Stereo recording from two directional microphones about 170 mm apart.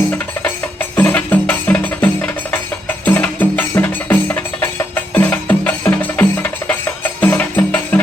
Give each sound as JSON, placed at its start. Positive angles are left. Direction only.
{"t": 0.4, "sound": "music", "side_deg": 10}